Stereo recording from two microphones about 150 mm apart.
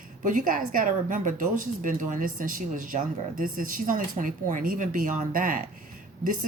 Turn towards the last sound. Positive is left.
turn(degrees=-60)  # may be behind; listen again after turning